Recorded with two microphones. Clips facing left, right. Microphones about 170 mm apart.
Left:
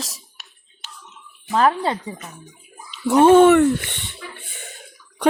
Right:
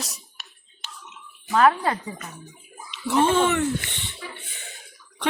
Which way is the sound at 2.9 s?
45° left (ahead or behind).